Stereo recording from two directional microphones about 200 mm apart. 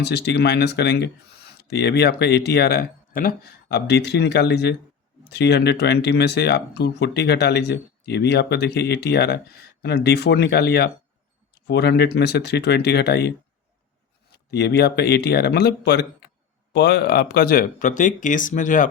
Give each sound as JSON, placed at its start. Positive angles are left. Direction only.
{"t": 0.0, "sound": "speech", "side_deg": 55}
{"t": 14.5, "sound": "speech", "side_deg": 55}